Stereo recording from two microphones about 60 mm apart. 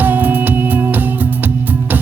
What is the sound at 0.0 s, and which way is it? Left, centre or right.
Music, right.